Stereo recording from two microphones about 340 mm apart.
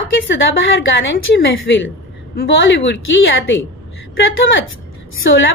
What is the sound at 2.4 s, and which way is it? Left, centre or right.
A woman's voice, left.